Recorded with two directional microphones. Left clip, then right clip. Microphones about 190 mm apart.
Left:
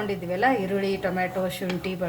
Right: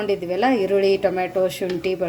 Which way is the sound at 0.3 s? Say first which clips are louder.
Right 2 dB; 40° right (ahead or behind).